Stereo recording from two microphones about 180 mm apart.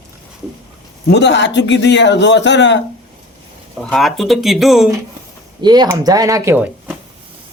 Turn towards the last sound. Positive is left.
turn(degrees=-10)  # may be behind; listen again after turning